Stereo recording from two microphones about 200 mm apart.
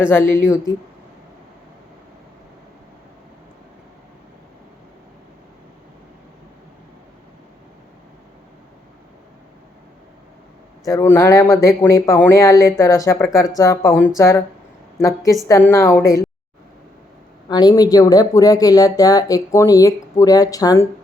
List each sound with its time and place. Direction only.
0.1 s speech: 10° left (ahead or behind)
10.8 s a woman's voice: 15° left (ahead or behind)
17.5 s speech: 20° left (ahead or behind)